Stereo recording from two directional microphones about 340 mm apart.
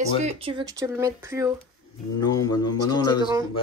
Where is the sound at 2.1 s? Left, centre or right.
Centre.